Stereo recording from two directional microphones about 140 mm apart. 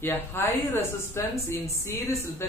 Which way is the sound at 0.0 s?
15° left (ahead or behind).